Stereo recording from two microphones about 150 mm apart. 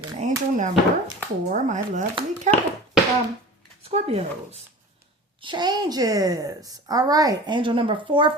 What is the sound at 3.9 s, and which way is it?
Speech, 45° right (ahead or behind).